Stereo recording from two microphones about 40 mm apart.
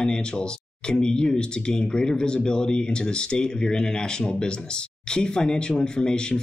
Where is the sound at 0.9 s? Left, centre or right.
Centre.